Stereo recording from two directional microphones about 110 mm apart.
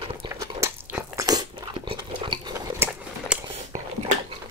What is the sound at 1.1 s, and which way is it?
Crunch, 35° right (ahead or behind).